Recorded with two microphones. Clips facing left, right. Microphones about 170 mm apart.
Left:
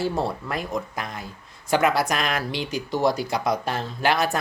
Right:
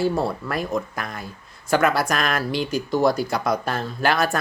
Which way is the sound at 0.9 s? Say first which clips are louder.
Right 1 dB; 20° left (ahead or behind).